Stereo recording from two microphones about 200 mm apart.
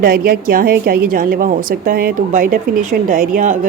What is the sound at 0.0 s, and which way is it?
A woman's voice, 45° right (ahead or behind).